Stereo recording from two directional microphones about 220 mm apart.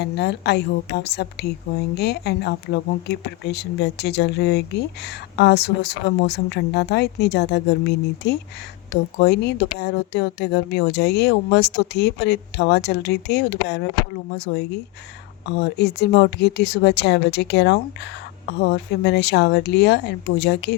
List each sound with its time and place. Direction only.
0.0 s speech: 50° left (ahead or behind)